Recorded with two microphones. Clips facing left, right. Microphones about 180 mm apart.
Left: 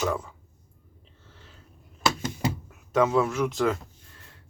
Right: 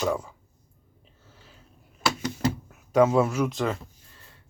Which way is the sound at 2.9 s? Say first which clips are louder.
Right 2 dB; 10° right (ahead or behind).